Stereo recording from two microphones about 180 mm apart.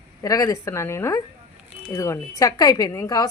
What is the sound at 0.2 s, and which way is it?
A woman's voice, 20° left (ahead or behind).